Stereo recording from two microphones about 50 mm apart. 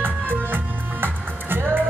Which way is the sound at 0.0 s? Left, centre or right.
Right.